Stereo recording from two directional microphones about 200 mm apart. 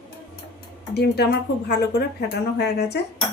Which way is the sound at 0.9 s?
55° left (ahead or behind).